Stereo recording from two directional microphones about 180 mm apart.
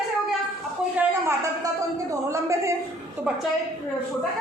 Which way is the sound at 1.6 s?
15° right (ahead or behind).